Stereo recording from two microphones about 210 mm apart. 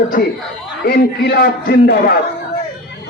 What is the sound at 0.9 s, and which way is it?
A man's voice, 50° left (ahead or behind).